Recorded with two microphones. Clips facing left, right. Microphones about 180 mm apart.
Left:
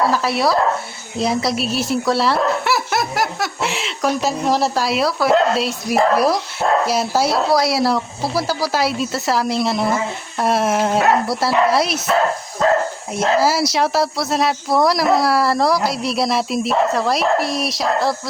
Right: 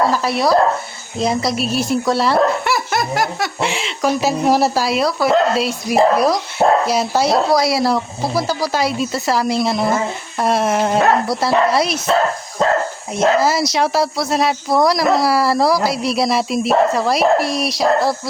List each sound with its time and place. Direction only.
0.1 s a sound: centre (ahead or behind)
1.2 s speech: centre (ahead or behind)
13.1 s speech: 5° left (ahead or behind)